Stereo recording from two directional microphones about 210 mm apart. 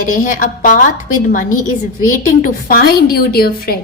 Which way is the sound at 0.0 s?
40° left (ahead or behind).